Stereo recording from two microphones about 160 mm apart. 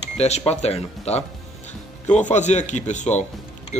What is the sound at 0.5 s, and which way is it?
Speech, 40° left (ahead or behind).